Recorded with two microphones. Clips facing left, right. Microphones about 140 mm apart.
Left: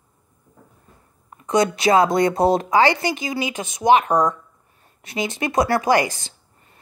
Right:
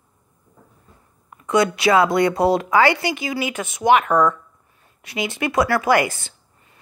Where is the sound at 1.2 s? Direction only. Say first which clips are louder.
Right 1 dB; 35° left (ahead or behind).